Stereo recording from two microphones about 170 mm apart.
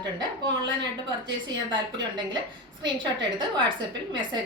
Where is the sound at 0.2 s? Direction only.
25° right (ahead or behind).